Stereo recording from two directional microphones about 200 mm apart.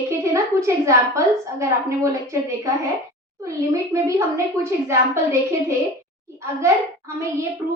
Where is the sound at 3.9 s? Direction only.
15° right (ahead or behind).